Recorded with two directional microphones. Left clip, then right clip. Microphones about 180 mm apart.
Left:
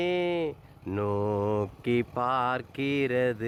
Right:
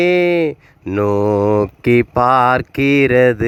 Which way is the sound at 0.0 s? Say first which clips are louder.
Right 14 dB; 40° right (ahead or behind).